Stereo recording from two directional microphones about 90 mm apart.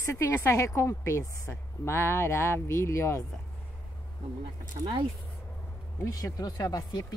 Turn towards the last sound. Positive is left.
turn(degrees=45)  # may be behind; listen again after turning